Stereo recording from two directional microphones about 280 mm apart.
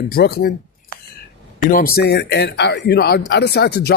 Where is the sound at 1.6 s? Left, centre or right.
Left.